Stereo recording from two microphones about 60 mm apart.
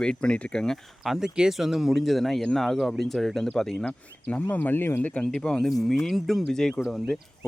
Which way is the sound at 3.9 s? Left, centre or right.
Left.